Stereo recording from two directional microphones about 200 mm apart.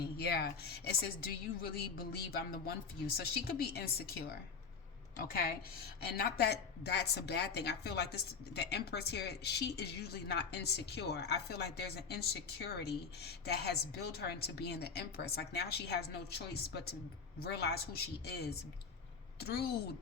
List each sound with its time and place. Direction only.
0.2 s a woman's voice: 50° left (ahead or behind)
6.1 s a woman's voice: 50° left (ahead or behind)